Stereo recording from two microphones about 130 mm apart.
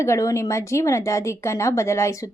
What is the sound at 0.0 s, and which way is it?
A woman's voice, 25° left (ahead or behind).